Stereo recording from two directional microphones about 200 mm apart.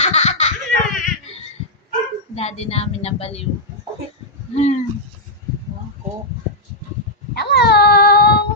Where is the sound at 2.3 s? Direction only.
30° left (ahead or behind).